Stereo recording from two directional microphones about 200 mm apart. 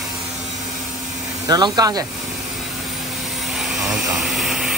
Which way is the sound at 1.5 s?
20° right (ahead or behind).